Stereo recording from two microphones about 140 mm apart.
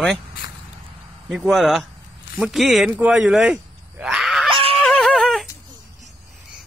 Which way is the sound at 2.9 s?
10° right (ahead or behind).